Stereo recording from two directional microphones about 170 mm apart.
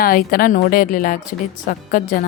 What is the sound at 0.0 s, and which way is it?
A woman's voice, 60° left (ahead or behind).